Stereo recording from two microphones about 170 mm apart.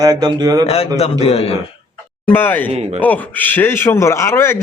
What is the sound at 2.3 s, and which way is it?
A man's voice, 10° left (ahead or behind).